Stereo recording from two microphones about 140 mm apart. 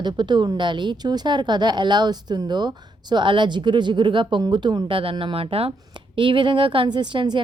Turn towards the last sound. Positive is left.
turn(degrees=-35)  # may be behind; listen again after turning